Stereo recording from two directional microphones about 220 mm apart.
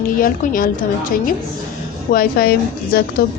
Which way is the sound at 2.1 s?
40° left (ahead or behind).